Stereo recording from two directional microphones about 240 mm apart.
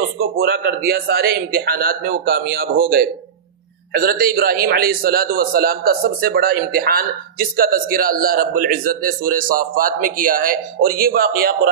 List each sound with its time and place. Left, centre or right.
0.2 s a man's voice: right